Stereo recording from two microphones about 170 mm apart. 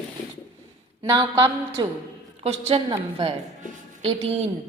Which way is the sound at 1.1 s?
25° right (ahead or behind).